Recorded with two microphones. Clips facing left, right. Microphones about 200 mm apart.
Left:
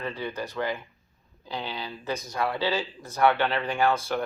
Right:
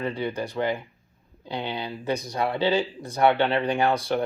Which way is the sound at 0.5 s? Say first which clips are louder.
Right 4 dB; 30° right (ahead or behind).